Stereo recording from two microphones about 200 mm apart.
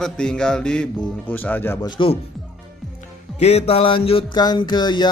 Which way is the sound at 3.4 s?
30° left (ahead or behind).